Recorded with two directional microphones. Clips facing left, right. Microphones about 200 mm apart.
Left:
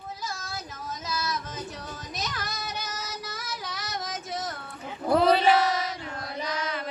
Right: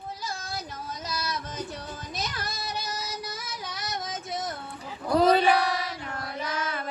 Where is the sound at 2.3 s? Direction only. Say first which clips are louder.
Right 1 dB; 30° right (ahead or behind).